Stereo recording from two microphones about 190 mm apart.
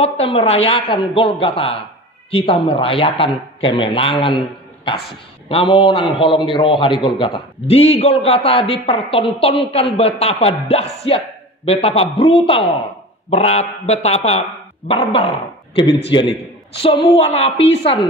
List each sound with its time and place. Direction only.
0.0 s a man's voice: 30° left (ahead or behind)
5.5 s a man's voice: 30° left (ahead or behind)